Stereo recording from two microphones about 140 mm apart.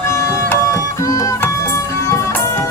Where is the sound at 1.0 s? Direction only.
25° left (ahead or behind).